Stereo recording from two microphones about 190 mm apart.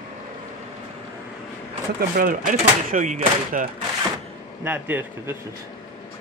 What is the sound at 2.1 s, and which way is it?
Speech, 45° right (ahead or behind).